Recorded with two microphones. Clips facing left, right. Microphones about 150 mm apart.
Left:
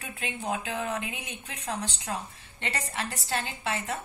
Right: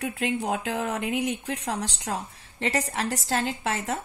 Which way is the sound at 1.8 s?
35° right (ahead or behind).